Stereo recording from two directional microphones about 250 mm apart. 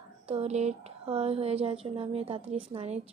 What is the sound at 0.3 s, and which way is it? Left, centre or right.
Speech, right.